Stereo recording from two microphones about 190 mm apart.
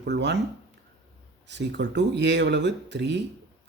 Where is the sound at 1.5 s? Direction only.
65° right (ahead or behind).